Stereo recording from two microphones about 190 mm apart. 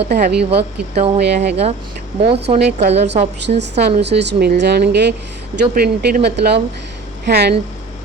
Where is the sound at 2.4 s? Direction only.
35° right (ahead or behind).